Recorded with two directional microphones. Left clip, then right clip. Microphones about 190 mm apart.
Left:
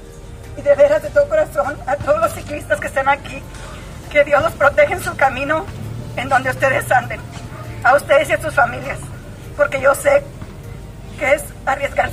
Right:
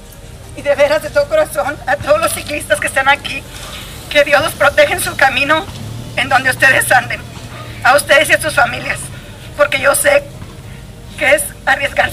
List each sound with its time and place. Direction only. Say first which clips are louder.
0.7 s a woman's voice: even; 5° left (ahead or behind)